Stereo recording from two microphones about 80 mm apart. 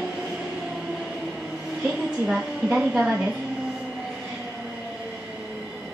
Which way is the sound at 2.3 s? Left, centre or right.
Centre.